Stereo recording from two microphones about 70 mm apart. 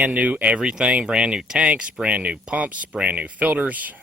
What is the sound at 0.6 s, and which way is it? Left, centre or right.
Speech, centre.